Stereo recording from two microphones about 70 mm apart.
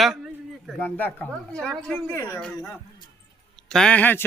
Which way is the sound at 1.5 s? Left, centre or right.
Centre.